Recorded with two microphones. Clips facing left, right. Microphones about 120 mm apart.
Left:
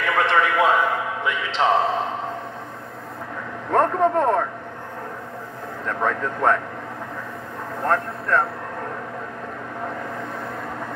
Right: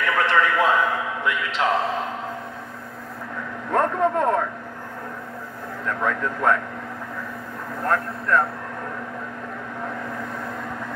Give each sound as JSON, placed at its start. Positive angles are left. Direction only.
{"t": 0.0, "sound": "a sound", "side_deg": 25}
{"t": 3.7, "sound": "a man's voice", "side_deg": 20}
{"t": 5.9, "sound": "a man's voice", "side_deg": 25}
{"t": 7.8, "sound": "a man's voice", "side_deg": 25}